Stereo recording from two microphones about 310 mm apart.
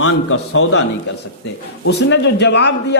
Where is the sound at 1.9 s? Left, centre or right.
Left.